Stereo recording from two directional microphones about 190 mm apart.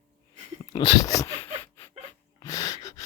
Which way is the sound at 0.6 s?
20° left (ahead or behind).